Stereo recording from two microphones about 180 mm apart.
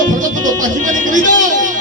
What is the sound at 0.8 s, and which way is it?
Speech, 45° right (ahead or behind).